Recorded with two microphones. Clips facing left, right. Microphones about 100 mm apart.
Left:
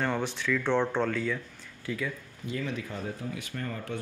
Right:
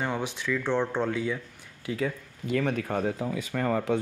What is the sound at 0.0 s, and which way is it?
Speech, 5° right (ahead or behind).